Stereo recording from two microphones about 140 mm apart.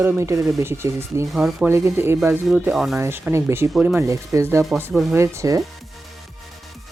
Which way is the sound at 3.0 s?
15° right (ahead or behind).